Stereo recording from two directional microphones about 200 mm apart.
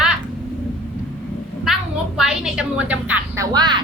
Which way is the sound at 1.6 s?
Centre (ahead or behind).